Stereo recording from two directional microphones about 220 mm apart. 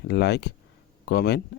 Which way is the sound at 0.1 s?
50° left (ahead or behind).